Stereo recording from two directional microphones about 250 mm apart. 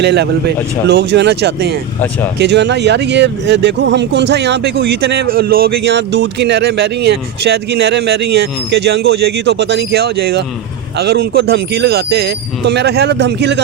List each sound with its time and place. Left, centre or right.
0.0 s speech: right